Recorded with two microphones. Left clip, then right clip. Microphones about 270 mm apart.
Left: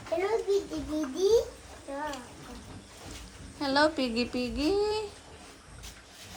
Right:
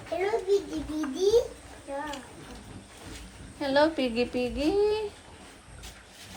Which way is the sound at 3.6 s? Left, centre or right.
Centre.